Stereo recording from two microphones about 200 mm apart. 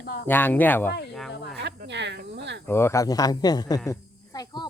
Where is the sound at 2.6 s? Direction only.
10° left (ahead or behind).